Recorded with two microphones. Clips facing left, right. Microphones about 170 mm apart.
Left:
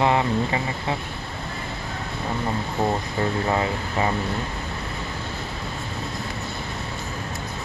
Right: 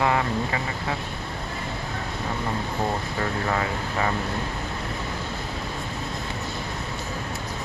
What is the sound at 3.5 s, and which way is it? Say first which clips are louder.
Speech: left 3 dB; 20° left (ahead or behind).